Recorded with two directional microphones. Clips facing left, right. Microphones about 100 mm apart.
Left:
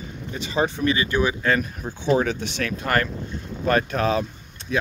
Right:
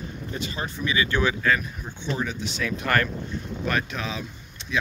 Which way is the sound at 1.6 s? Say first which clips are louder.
Left 6 dB; 45° left (ahead or behind).